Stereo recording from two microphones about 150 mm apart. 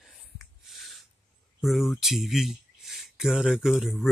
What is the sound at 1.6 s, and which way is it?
Speech, centre (ahead or behind).